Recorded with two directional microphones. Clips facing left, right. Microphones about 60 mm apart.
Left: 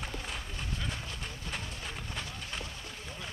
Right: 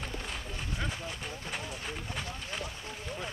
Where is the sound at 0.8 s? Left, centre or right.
Centre.